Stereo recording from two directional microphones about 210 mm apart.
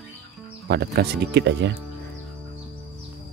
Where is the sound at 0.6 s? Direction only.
50° right (ahead or behind).